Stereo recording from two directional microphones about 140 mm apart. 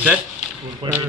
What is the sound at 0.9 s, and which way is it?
Speech, 30° right (ahead or behind).